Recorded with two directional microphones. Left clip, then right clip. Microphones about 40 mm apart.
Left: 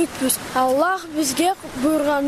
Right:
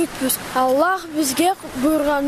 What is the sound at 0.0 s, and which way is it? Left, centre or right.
Speech, centre.